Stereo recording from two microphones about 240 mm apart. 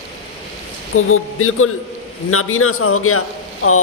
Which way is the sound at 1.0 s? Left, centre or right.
Left.